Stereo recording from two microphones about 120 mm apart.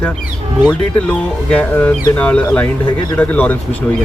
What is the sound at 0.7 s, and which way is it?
Speech, 10° left (ahead or behind).